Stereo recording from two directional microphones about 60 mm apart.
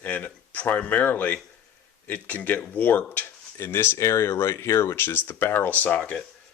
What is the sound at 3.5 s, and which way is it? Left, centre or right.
Speech, left.